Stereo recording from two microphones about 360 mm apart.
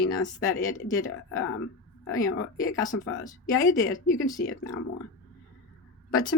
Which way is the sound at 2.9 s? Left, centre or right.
Left.